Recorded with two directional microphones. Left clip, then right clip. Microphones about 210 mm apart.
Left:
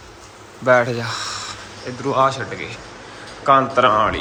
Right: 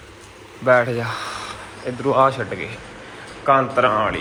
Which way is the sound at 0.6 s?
10° left (ahead or behind).